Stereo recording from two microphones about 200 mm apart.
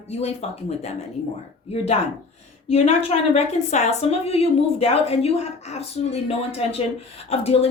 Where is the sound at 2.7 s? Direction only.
30° left (ahead or behind).